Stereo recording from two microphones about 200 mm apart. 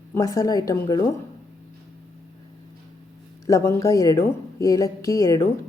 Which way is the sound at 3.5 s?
15° left (ahead or behind).